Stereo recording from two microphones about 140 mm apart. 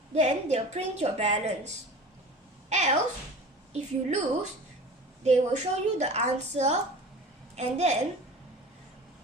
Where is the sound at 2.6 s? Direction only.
55° right (ahead or behind).